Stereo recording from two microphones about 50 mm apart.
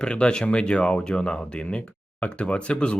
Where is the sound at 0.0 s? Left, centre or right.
Centre.